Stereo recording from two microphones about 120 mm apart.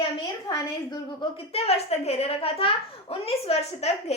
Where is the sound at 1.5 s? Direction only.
60° left (ahead or behind).